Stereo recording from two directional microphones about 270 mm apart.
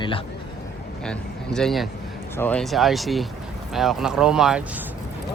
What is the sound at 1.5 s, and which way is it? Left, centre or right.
Speech, centre.